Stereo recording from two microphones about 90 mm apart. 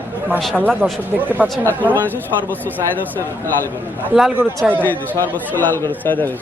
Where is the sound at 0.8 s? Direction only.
10° right (ahead or behind).